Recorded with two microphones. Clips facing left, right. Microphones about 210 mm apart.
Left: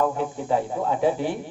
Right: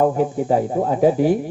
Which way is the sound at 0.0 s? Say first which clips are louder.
Right 7 dB; 45° right (ahead or behind).